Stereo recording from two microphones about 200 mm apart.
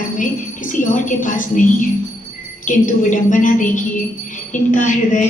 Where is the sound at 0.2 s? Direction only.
40° left (ahead or behind).